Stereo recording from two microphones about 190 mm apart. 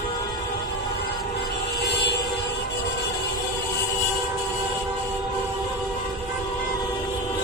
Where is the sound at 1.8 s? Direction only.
65° left (ahead or behind).